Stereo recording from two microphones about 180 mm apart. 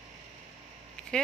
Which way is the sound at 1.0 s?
5° left (ahead or behind).